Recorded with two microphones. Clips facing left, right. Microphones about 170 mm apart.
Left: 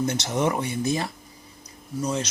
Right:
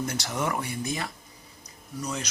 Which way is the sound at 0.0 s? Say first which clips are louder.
Left 6 dB; 20° left (ahead or behind).